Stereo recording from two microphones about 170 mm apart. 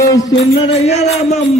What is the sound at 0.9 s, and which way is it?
Music, 40° left (ahead or behind).